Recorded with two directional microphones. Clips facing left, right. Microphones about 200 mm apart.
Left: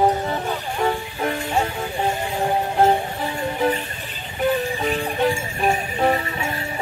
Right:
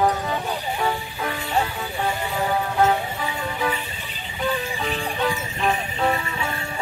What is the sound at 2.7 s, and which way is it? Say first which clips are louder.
Music: left 3 dB; 35° left (ahead or behind).